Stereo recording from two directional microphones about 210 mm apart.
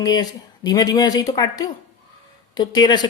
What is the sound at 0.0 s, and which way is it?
Speech, 20° left (ahead or behind).